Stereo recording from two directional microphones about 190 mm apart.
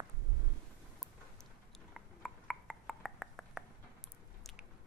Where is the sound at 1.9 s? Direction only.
Centre (ahead or behind).